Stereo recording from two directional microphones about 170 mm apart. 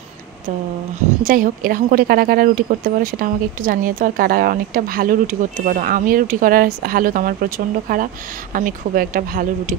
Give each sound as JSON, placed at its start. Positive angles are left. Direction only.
{"t": 1.2, "sound": "speech", "side_deg": -55}